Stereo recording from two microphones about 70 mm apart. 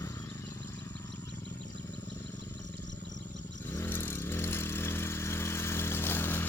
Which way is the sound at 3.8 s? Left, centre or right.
Left.